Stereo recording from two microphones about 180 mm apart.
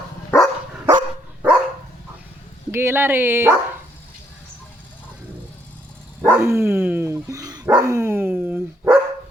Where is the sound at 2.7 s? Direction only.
15° right (ahead or behind).